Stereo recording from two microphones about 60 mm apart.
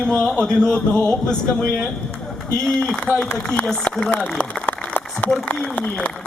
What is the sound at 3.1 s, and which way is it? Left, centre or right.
Speech, right.